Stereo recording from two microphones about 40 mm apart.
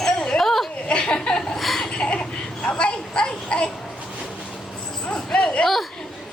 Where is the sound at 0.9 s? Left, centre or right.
Left.